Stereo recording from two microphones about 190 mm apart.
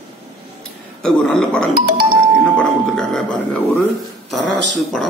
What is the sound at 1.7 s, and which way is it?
Speech, 50° right (ahead or behind).